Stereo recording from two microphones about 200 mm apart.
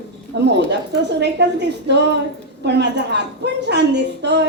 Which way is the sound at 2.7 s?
60° right (ahead or behind).